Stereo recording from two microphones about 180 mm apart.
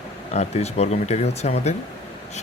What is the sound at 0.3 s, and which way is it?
Speech, 35° left (ahead or behind).